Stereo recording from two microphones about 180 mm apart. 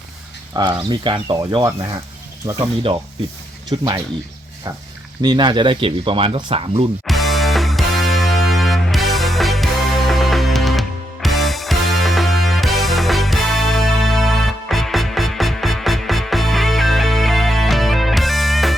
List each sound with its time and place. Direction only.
0.5 s speech: 20° right (ahead or behind)
3.7 s speech: 20° right (ahead or behind)
5.2 s speech: 25° right (ahead or behind)
7.1 s music: centre (ahead or behind)